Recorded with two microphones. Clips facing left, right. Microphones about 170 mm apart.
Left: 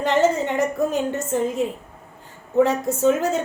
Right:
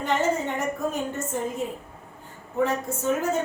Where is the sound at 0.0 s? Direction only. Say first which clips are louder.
Left 5 dB; 90° left.